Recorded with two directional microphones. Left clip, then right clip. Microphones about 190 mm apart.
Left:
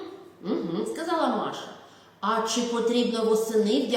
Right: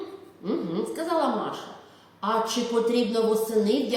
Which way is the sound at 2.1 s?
15° right (ahead or behind).